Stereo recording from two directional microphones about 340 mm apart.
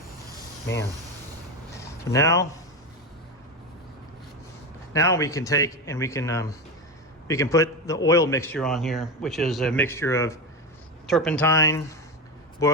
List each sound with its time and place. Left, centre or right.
1.8 s speech: centre
4.9 s a man's voice: centre